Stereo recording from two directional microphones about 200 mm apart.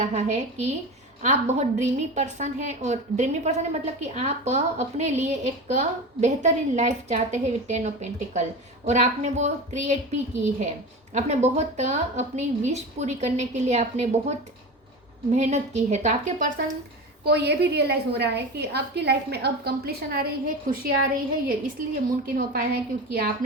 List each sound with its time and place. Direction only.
0.0 s speech: 35° right (ahead or behind)
17.2 s a woman's voice: 55° right (ahead or behind)
21.4 s a woman's voice: 45° right (ahead or behind)